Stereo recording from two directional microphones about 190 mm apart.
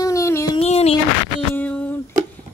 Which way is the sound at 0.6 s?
35° left (ahead or behind).